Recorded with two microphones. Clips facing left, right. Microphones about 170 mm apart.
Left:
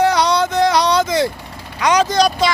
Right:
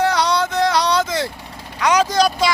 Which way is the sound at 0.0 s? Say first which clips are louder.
Left 3 dB; 15° left (ahead or behind).